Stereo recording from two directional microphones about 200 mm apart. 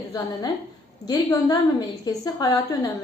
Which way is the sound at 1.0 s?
20° left (ahead or behind).